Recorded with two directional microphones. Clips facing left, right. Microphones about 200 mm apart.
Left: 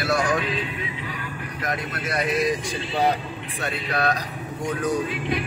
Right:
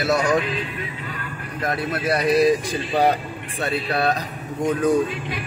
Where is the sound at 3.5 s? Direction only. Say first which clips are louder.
Right 4 dB; 30° right (ahead or behind).